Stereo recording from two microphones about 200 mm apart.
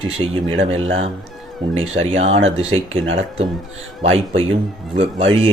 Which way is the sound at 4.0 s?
30° right (ahead or behind).